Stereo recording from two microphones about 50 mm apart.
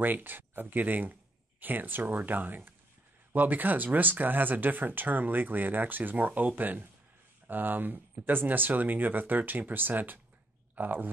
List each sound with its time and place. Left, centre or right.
0.0 s speech: right